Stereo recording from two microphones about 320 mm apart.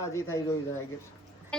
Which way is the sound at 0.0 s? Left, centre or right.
Centre.